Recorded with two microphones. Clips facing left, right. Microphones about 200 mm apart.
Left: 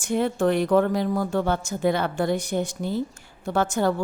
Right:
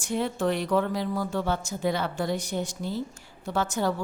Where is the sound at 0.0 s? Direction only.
50° left (ahead or behind).